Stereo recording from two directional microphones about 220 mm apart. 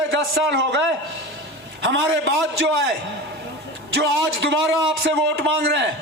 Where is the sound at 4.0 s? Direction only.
50° right (ahead or behind).